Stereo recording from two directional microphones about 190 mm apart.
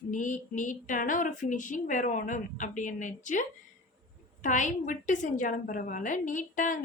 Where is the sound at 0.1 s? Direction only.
40° left (ahead or behind).